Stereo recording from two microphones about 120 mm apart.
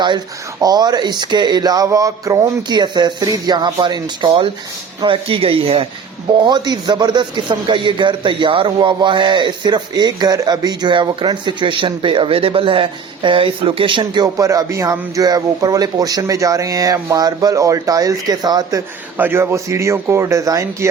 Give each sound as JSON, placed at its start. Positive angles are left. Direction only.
{"t": 0.6, "sound": "a man's voice", "side_deg": -35}
{"t": 6.3, "sound": "a man's voice", "side_deg": -40}
{"t": 19.1, "sound": "speech", "side_deg": -15}